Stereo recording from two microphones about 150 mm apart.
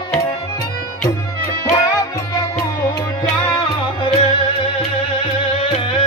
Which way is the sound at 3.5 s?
35° left (ahead or behind).